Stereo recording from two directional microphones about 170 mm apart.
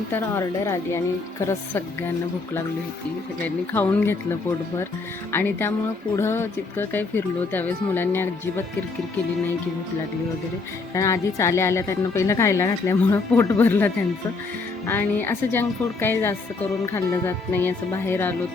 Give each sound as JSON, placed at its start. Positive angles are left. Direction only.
{"t": 0.1, "sound": "speech", "side_deg": 15}
{"t": 3.4, "sound": "speech", "side_deg": 10}
{"t": 10.9, "sound": "speech", "side_deg": 15}